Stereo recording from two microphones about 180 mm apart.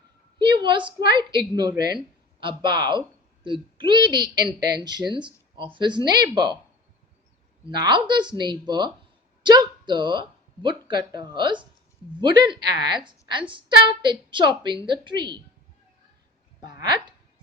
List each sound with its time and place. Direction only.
0.3 s a sound: 25° right (ahead or behind)
0.9 s speech: 25° right (ahead or behind)
7.6 s speech: 25° right (ahead or behind)
16.6 s speech: 25° right (ahead or behind)